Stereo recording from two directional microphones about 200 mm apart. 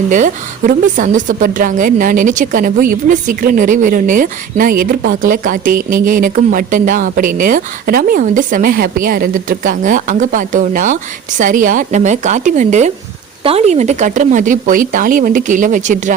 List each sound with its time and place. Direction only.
0.1 s a woman's voice: 40° right (ahead or behind)